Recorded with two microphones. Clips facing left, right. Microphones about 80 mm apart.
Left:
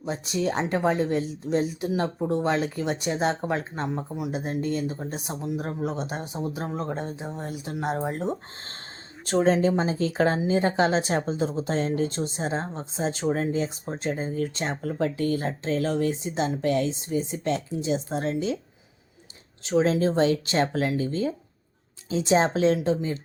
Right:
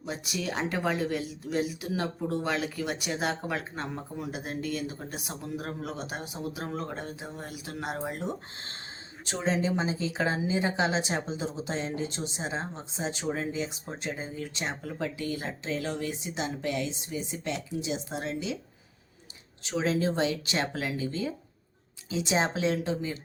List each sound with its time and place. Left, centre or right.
0.0 s speech: left
3.8 s speech: centre
4.3 s speech: left
9.2 s speech: left
19.6 s speech: left